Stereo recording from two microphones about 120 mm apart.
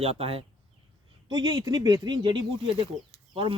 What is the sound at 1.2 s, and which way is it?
Speech, 35° right (ahead or behind).